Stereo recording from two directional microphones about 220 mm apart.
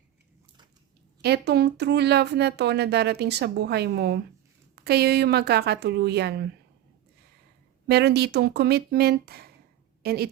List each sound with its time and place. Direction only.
1.2 s speech: 50° right (ahead or behind)
7.9 s a woman's voice: 50° right (ahead or behind)